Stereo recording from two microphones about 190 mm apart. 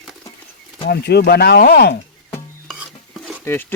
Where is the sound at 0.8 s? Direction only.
60° left (ahead or behind).